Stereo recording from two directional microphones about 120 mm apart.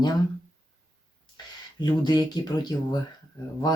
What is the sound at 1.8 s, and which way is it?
Speech, 35° left (ahead or behind).